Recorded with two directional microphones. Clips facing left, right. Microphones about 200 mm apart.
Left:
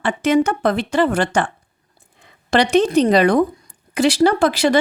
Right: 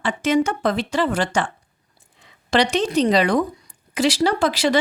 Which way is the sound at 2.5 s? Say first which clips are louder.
Left 4 dB; 55° left (ahead or behind).